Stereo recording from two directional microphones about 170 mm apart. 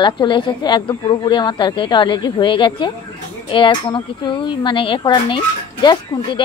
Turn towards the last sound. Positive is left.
turn(degrees=30)  # may be behind; listen again after turning